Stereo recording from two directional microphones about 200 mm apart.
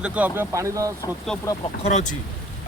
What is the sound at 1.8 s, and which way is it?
Speech, 35° left (ahead or behind).